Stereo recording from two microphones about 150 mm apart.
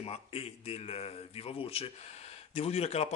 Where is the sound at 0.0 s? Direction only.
40° left (ahead or behind).